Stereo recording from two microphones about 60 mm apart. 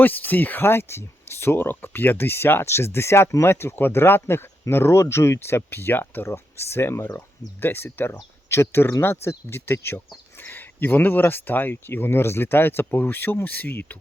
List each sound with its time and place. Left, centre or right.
0.0 s speech: left
6.2 s speech: left